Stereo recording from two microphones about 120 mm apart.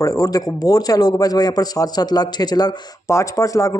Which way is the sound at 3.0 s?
25° left (ahead or behind).